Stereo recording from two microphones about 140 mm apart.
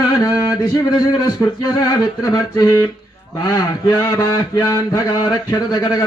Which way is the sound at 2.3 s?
25° left (ahead or behind).